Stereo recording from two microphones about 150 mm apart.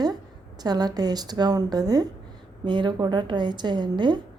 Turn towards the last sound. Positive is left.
turn(degrees=-30)  # may be behind; listen again after turning